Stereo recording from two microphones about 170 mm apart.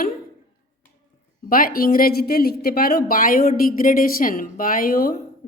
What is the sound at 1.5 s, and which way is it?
Speech, 55° left (ahead or behind).